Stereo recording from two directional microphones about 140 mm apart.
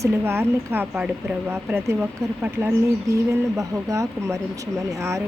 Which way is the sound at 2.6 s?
20° right (ahead or behind).